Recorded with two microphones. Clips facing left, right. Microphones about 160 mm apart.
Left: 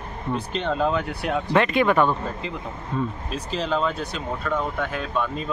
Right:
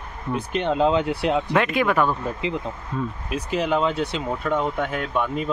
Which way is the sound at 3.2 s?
10° right (ahead or behind).